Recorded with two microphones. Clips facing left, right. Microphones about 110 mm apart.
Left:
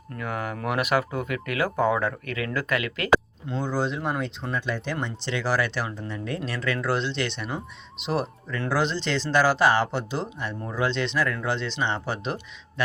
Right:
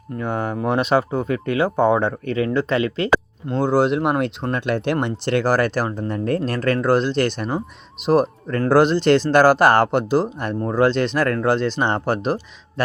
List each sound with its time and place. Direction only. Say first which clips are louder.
0.2 s speech: right 7 dB; 30° right (ahead or behind)
3.4 s speech: right 9 dB; 55° right (ahead or behind)